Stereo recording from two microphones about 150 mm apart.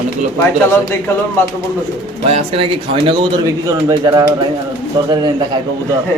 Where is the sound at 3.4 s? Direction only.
20° right (ahead or behind).